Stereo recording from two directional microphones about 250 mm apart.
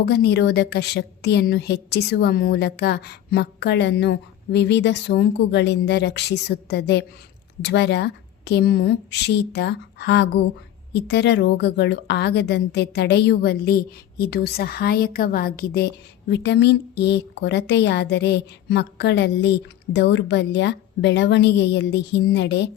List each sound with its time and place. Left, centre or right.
0.0 s a woman's voice: left